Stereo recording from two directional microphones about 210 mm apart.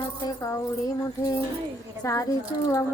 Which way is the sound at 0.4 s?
15° left (ahead or behind).